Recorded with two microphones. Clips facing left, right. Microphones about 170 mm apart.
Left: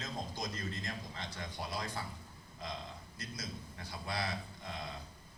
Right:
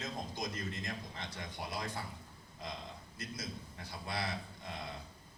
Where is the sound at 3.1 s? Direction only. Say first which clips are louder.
Right 2 dB; 25° right (ahead or behind).